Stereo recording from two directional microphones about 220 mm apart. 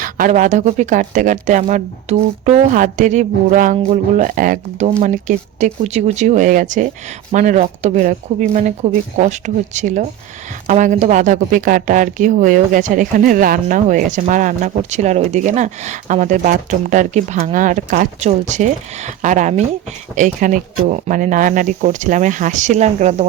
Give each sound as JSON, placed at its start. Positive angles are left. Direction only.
{"t": 0.0, "sound": "speech", "side_deg": -35}